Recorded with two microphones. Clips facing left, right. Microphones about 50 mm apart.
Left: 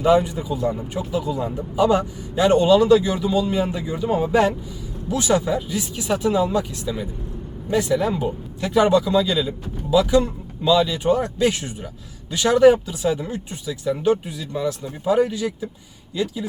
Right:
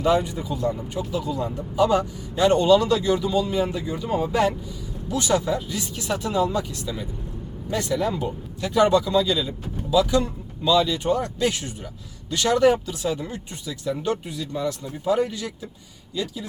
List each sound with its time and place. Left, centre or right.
0.0 s speech: centre